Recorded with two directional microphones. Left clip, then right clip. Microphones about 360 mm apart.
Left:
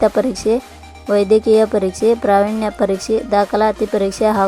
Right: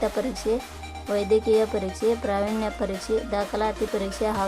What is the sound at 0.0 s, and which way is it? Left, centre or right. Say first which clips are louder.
Speech: left 11 dB; centre.